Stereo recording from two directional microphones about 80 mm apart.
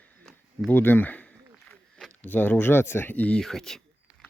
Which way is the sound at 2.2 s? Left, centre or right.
Left.